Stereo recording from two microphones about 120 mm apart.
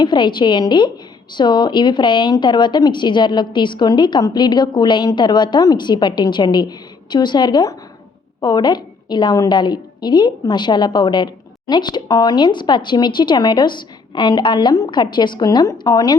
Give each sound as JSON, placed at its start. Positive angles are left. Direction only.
{"t": 0.0, "sound": "a woman's voice", "side_deg": 40}